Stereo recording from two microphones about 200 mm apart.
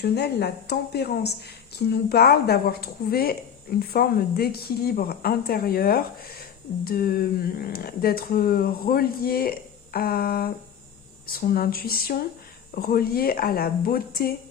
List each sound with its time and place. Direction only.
0.0 s a woman's voice: 55° left (ahead or behind)